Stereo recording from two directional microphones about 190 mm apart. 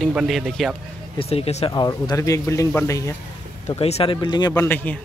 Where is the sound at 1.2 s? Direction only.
30° left (ahead or behind).